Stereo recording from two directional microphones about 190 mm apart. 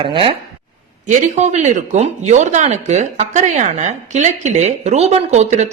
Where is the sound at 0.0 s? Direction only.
30° right (ahead or behind).